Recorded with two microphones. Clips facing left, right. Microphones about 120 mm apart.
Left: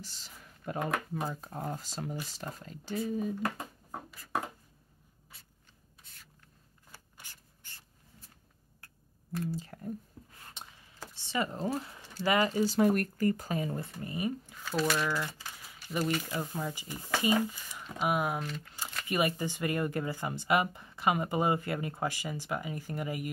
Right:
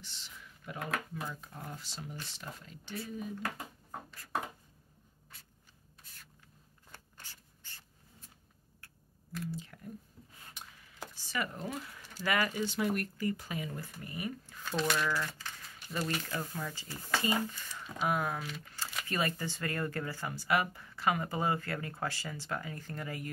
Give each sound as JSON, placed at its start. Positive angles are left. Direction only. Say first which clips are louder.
{"t": 0.0, "sound": "computer keyboard", "louder": "left 2 dB", "side_deg": 40}
{"t": 1.2, "sound": "speech", "louder": "left 6 dB", "side_deg": 40}
{"t": 5.3, "sound": "a sound", "louder": "right 1 dB", "side_deg": 0}
{"t": 6.9, "sound": "a sound", "louder": "even", "side_deg": 15}
{"t": 9.5, "sound": "speech", "louder": "left 5 dB", "side_deg": 40}
{"t": 10.6, "sound": "a sound", "louder": "left 2 dB", "side_deg": 25}
{"t": 11.2, "sound": "speech", "louder": "left 5 dB", "side_deg": 25}
{"t": 12.5, "sound": "speech", "louder": "left 7 dB", "side_deg": 40}
{"t": 14.6, "sound": "speech", "louder": "left 2 dB", "side_deg": 5}
{"t": 16.2, "sound": "speech", "louder": "left 3 dB", "side_deg": 15}
{"t": 18.4, "sound": "speech", "louder": "left 4 dB", "side_deg": -5}
{"t": 19.0, "sound": "speech", "louder": "left 5 dB", "side_deg": 15}